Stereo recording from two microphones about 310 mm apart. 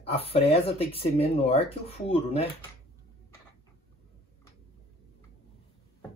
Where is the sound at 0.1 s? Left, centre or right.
Centre.